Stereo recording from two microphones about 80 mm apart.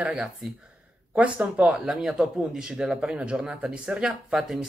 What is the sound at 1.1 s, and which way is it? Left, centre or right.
Speech, centre.